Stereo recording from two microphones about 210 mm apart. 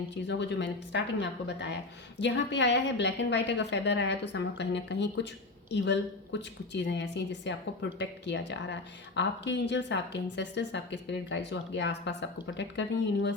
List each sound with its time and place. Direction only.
0.1 s a woman's voice: 55° left (ahead or behind)